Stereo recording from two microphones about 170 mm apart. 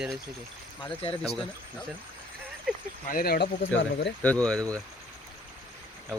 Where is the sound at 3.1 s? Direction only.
60° left (ahead or behind); by 3.7 s 75° left (ahead or behind).